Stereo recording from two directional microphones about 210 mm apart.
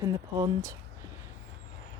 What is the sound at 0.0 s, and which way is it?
Speech, 15° right (ahead or behind).